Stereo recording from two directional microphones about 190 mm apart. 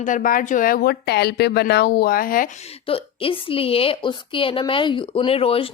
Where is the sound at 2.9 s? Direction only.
30° left (ahead or behind).